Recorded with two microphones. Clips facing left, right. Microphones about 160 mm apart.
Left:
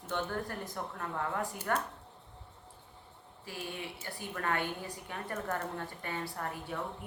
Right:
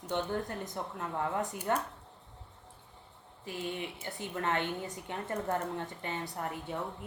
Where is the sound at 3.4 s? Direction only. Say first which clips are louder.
Right 4 dB; 20° right (ahead or behind).